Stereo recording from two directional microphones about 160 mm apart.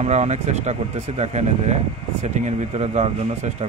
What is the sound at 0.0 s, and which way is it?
Speech, 45° right (ahead or behind).